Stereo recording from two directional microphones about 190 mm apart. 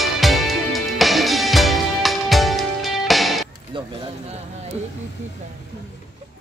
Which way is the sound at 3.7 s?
25° right (ahead or behind).